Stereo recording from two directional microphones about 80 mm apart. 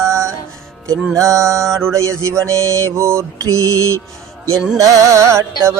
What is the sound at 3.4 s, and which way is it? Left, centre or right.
Mantra, right.